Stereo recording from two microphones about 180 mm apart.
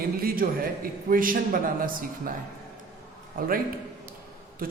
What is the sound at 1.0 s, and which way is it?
Speech, 50° right (ahead or behind).